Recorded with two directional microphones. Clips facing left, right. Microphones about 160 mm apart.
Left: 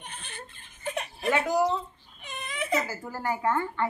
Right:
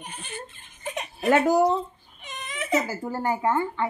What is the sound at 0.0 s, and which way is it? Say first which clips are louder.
Laughter: right 5 dB; 10° right (ahead or behind).